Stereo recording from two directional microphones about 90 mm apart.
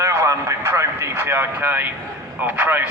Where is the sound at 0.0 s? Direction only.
30° right (ahead or behind).